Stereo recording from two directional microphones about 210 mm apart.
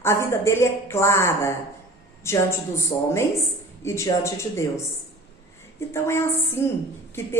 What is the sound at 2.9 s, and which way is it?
Speech, 25° left (ahead or behind).